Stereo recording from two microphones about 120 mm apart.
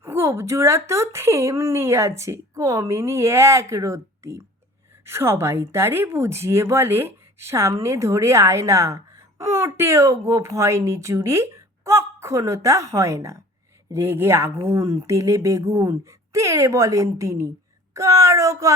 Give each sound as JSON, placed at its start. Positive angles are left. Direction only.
{"t": 0.0, "sound": "a woman's voice", "side_deg": -20}